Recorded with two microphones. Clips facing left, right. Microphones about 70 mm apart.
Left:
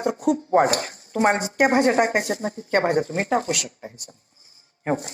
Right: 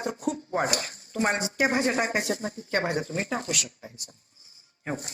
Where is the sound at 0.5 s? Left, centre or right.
Left.